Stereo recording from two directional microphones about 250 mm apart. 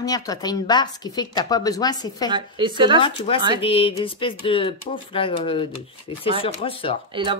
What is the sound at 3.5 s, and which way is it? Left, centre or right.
Speech, left.